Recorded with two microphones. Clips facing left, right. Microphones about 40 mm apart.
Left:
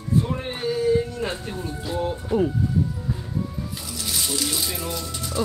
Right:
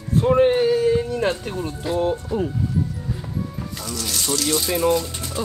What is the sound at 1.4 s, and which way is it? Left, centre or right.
Speech, right.